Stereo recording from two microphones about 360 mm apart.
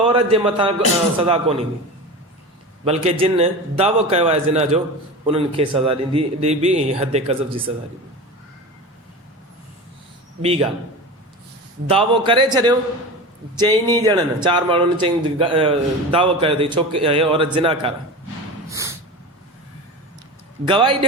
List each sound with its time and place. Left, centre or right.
0.1 s speech: centre
2.8 s speech: centre
10.4 s speech: centre
11.9 s speech: centre
18.7 s snort: centre
20.7 s speech: centre